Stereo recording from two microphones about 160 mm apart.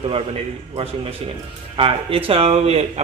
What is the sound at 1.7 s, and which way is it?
A man's voice, 35° right (ahead or behind).